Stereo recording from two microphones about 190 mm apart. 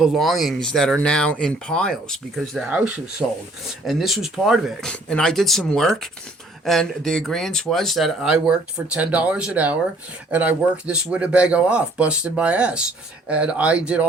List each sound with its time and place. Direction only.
0.0 s speech: centre (ahead or behind)